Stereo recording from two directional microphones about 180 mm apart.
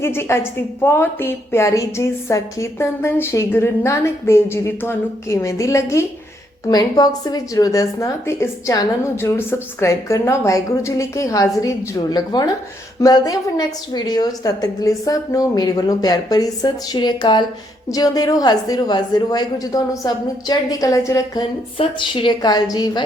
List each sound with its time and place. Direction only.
0.0 s a woman's voice: 15° left (ahead or behind)